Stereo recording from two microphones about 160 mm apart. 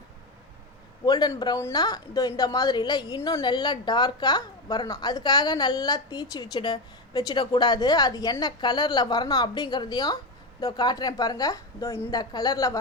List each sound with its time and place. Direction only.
1.0 s a woman's voice: 25° left (ahead or behind)